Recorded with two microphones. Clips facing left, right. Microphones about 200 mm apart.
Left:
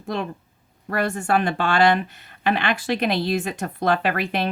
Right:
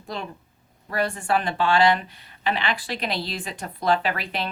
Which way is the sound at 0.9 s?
50° left (ahead or behind).